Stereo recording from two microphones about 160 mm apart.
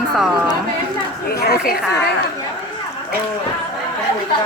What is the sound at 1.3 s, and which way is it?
Speech, 75° left (ahead or behind).